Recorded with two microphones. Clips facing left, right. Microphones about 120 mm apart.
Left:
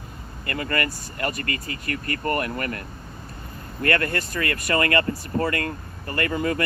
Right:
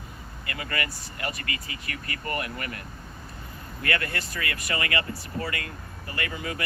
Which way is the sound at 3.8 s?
45° left (ahead or behind).